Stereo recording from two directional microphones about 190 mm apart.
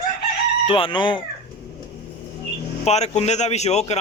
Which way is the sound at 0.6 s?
25° left (ahead or behind).